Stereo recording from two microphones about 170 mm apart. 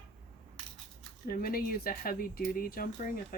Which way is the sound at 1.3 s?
60° left (ahead or behind).